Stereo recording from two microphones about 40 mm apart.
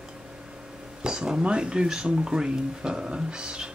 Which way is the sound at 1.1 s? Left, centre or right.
Right.